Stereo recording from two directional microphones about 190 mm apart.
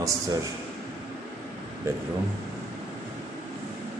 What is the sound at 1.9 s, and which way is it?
Speech, 15° right (ahead or behind).